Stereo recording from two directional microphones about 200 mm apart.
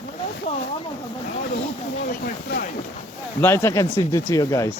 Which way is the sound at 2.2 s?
45° left (ahead or behind).